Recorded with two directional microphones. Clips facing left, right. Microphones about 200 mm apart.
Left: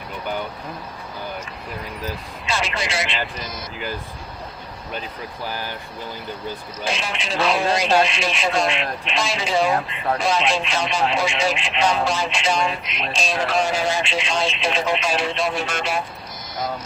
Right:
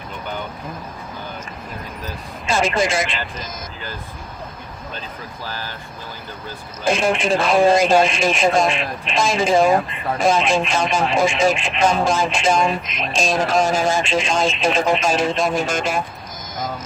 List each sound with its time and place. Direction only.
2.5 s speech: 50° right (ahead or behind)
5.5 s speech: 15° left (ahead or behind)
6.8 s speech: 50° right (ahead or behind)